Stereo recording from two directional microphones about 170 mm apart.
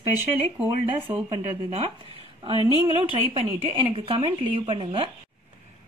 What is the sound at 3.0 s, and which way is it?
A woman's voice, 35° right (ahead or behind).